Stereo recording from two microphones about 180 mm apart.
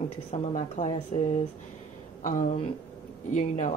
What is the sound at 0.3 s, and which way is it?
Speech, 40° left (ahead or behind).